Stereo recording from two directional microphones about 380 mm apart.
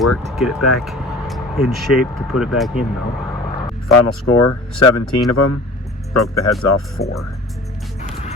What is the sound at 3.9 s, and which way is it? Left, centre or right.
Speech, left.